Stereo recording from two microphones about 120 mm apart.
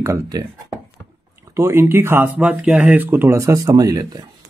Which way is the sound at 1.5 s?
20° right (ahead or behind).